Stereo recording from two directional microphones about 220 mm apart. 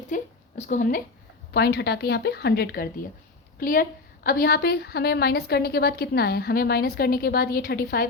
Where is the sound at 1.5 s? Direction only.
50° left (ahead or behind).